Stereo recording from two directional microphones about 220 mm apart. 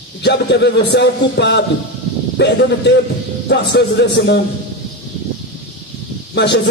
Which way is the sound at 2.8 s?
50° left (ahead or behind).